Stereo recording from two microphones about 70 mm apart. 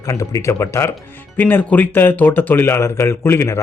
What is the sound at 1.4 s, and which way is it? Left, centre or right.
Speech, left.